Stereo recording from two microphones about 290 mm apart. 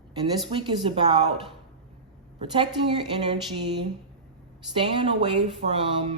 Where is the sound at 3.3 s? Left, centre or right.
Centre.